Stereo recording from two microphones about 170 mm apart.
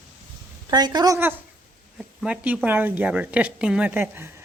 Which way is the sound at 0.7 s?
25° right (ahead or behind).